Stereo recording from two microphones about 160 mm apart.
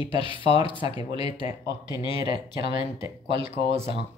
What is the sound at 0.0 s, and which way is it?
Speech, 30° left (ahead or behind).